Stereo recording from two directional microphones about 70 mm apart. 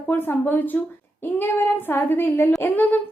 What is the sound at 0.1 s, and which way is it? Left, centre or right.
A woman's voice, left.